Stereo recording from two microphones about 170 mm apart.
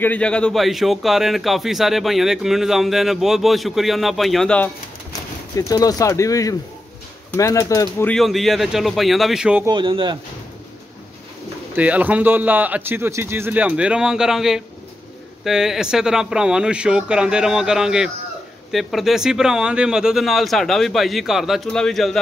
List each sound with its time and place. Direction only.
0.0 s a man's voice: 10° left (ahead or behind)
5.6 s speech: 20° left (ahead or behind)
8.1 s a man's voice: centre (ahead or behind)
9.7 s speech: 30° right (ahead or behind)
11.7 s a man's voice: 10° right (ahead or behind)